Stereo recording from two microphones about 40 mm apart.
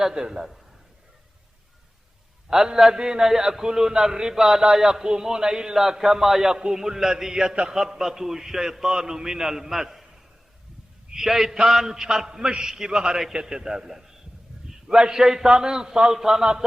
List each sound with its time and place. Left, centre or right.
0.0 s a man's voice: centre
2.5 s a man's voice: centre
14.7 s a sound: centre
15.0 s a man's voice: centre